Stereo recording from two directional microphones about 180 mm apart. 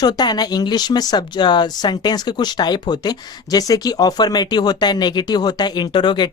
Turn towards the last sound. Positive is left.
turn(degrees=25)  # may be behind; listen again after turning